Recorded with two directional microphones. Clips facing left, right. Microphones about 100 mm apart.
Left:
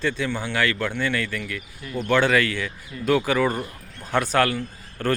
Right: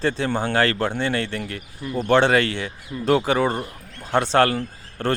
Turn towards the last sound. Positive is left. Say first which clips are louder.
# right 1 dB
turn(degrees=-30)  # may be behind; listen again after turning